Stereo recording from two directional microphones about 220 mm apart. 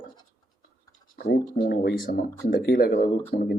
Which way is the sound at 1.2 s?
45° left (ahead or behind).